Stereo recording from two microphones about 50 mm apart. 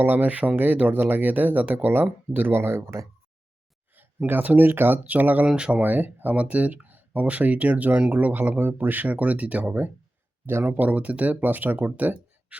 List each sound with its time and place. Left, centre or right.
0.0 s speech: right
4.3 s speech: right
5.5 s speech: right
5.8 s speech: right